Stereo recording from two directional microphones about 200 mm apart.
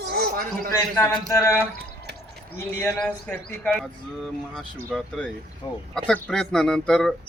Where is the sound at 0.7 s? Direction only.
15° left (ahead or behind).